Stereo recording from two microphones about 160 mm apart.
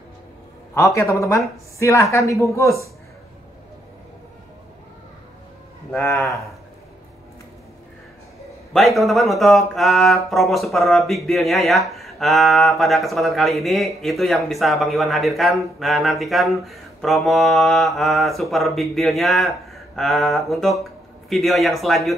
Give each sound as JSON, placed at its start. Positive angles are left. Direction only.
{"t": 0.7, "sound": "a woman's voice", "side_deg": 20}
{"t": 5.9, "sound": "speech", "side_deg": 10}
{"t": 8.7, "sound": "speech", "side_deg": 0}